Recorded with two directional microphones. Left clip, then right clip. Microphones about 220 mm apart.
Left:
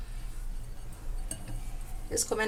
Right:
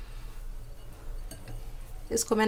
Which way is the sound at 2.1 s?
40° right (ahead or behind).